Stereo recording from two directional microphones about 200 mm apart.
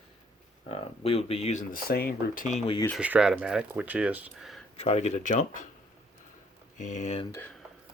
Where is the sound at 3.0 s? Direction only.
5° right (ahead or behind).